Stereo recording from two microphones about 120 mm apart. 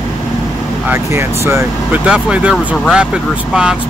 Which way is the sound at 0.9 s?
20° right (ahead or behind).